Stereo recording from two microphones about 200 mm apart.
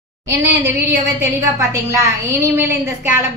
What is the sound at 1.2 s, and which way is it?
A woman's voice, 15° right (ahead or behind).